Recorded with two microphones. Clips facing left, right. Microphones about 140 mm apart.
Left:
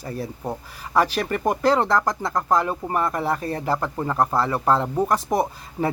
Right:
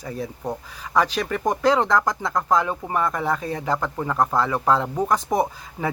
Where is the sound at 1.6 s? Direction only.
35° left (ahead or behind).